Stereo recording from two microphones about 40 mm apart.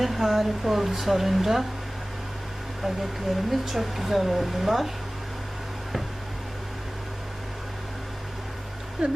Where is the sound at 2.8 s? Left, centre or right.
Centre.